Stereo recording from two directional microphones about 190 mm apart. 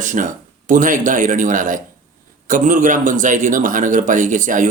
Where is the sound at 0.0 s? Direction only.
45° right (ahead or behind).